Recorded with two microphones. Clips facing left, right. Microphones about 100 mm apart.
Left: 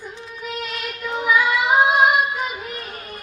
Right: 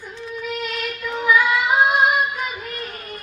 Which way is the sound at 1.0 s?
15° left (ahead or behind).